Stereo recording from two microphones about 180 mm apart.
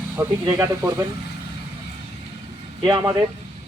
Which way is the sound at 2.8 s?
20° right (ahead or behind).